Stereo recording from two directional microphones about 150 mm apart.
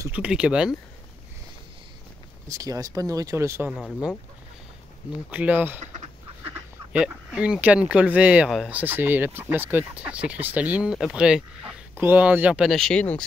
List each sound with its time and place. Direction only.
0.1 s speech: 5° right (ahead or behind)
2.4 s speech: 20° right (ahead or behind)
3.7 s speech: centre (ahead or behind)
5.3 s speech: 10° right (ahead or behind)
6.9 s speech: 10° right (ahead or behind); by 13.2 s 10° left (ahead or behind)